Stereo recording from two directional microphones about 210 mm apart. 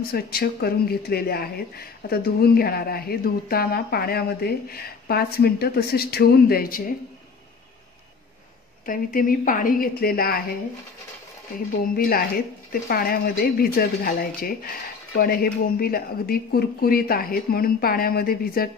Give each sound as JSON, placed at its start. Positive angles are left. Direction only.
{"t": 0.1, "sound": "speech", "side_deg": 45}
{"t": 8.8, "sound": "a woman's voice", "side_deg": 40}
{"t": 11.9, "sound": "speech", "side_deg": 45}